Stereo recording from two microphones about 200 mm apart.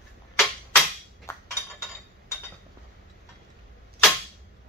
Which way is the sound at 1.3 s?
15° left (ahead or behind).